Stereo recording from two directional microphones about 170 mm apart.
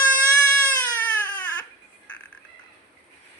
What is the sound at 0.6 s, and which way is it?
Baby cry, 10° left (ahead or behind).